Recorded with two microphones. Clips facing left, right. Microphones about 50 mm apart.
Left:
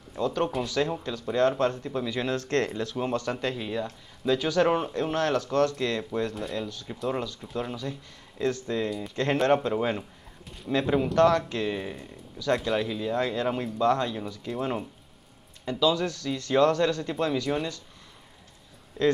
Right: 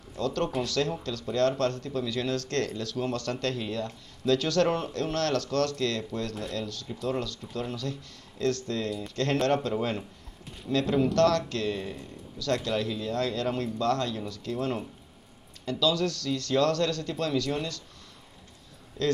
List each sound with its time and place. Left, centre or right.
0.1 s speech: centre
19.0 s speech: centre